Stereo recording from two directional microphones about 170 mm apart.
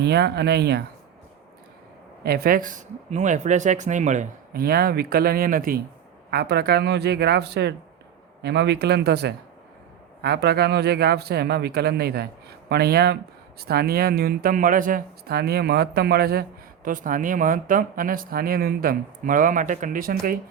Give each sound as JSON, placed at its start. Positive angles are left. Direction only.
{"t": 0.0, "sound": "a man's voice", "side_deg": -75}
{"t": 2.2, "sound": "speech", "side_deg": -65}
{"t": 4.6, "sound": "speech", "side_deg": -65}
{"t": 6.3, "sound": "a man's voice", "side_deg": -70}